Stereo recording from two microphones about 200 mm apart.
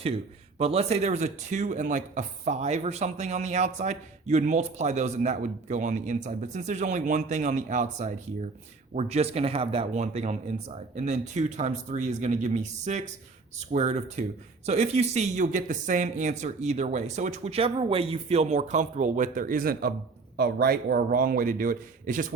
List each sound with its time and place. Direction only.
0.6 s a man's voice: 30° right (ahead or behind)